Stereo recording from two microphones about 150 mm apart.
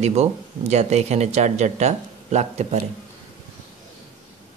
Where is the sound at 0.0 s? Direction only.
45° right (ahead or behind).